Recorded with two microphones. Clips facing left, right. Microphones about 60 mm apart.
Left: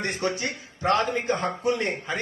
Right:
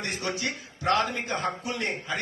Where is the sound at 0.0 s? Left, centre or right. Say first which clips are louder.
Left 3 dB; left.